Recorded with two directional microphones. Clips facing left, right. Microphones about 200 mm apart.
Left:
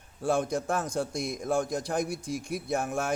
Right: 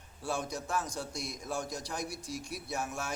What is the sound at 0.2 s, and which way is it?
Speech, 55° left (ahead or behind).